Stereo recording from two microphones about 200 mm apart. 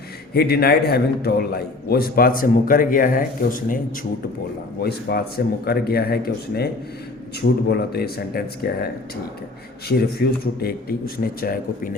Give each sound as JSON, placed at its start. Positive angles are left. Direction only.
{"t": 0.3, "sound": "a man's voice", "side_deg": 50}
{"t": 4.8, "sound": "a man's voice", "side_deg": 50}
{"t": 7.7, "sound": "a man's voice", "side_deg": 50}
{"t": 9.9, "sound": "a man's voice", "side_deg": 50}